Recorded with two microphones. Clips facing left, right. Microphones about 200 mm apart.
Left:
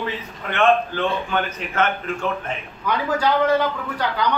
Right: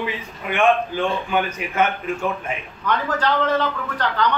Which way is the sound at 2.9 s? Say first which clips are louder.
Left 1 dB; 10° left (ahead or behind).